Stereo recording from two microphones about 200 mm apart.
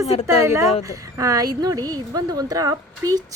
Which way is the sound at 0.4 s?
15° right (ahead or behind).